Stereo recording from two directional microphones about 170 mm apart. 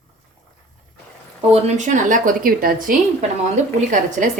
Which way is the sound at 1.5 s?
40° right (ahead or behind).